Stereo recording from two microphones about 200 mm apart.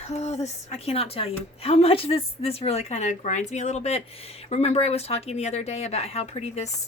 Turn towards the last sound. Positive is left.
turn(degrees=35)  # may be behind; listen again after turning